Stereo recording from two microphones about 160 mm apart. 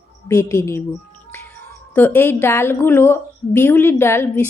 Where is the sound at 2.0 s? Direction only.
15° left (ahead or behind).